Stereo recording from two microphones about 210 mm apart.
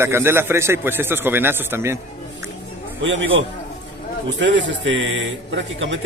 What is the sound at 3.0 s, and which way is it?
Speech, 65° right (ahead or behind).